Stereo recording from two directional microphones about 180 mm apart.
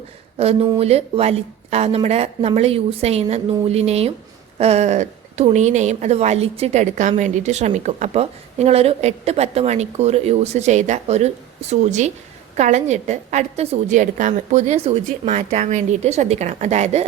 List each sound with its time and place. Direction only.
0.3 s a woman's voice: 35° right (ahead or behind)